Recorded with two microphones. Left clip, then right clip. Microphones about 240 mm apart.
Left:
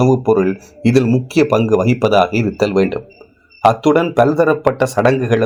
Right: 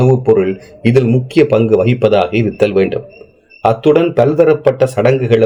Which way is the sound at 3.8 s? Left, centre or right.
Left.